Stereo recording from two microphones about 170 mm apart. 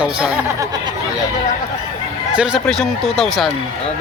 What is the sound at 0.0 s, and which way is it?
Speech, 5° right (ahead or behind).